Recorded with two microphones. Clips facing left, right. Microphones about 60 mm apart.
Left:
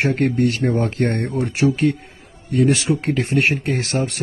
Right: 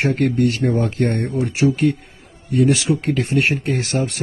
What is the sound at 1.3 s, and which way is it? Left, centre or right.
A man's voice, left.